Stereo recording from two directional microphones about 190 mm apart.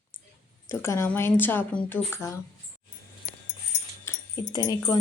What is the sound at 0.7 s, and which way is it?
A woman's voice, 15° left (ahead or behind).